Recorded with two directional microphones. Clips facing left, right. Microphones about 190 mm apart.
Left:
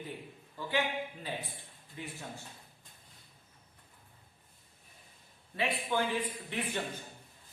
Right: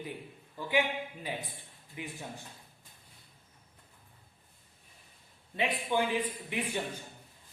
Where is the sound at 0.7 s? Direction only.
15° right (ahead or behind).